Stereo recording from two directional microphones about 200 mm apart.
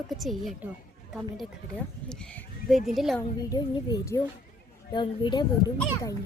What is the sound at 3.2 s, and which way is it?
A woman's voice, 20° left (ahead or behind).